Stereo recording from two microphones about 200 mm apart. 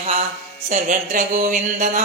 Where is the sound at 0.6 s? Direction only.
40° right (ahead or behind).